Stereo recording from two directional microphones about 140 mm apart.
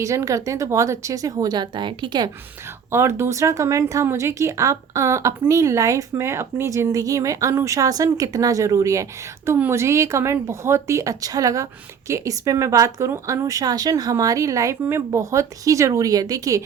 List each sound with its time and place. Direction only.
0.0 s speech: 20° right (ahead or behind)
2.9 s speech: 20° right (ahead or behind)